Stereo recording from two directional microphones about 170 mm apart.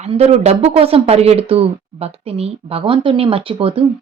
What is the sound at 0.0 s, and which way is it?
Speech, 40° right (ahead or behind).